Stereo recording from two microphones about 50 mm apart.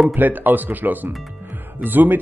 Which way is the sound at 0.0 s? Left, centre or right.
Right.